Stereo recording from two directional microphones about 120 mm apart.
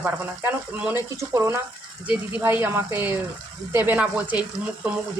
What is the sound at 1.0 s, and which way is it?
Speech, 25° right (ahead or behind).